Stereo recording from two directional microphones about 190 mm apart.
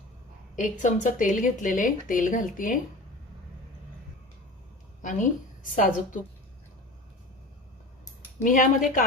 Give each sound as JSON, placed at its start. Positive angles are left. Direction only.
{"t": 0.5, "sound": "speech", "side_deg": 40}
{"t": 5.0, "sound": "speech", "side_deg": 45}
{"t": 8.4, "sound": "speech", "side_deg": 45}